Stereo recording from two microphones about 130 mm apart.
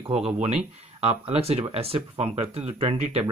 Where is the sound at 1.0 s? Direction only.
50° right (ahead or behind).